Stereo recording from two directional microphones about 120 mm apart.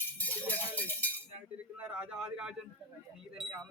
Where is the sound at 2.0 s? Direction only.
5° right (ahead or behind).